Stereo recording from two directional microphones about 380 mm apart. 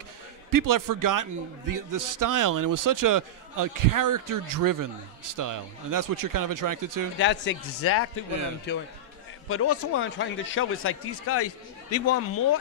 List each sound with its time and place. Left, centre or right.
0.5 s a man's voice: right
7.2 s speech: left